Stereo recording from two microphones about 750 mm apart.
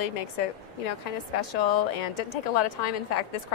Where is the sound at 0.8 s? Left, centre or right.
Left.